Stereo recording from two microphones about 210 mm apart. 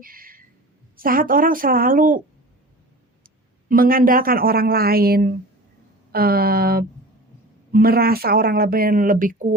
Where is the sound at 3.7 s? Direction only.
45° right (ahead or behind).